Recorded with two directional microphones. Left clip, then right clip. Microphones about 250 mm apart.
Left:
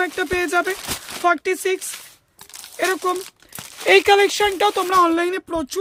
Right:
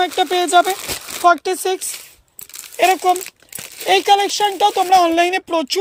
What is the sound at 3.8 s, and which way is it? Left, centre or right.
Speech, centre.